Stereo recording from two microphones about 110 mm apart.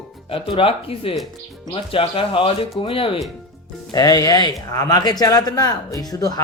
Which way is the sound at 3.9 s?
35° left (ahead or behind).